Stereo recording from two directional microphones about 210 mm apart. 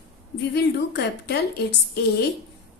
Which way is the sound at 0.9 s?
55° left (ahead or behind).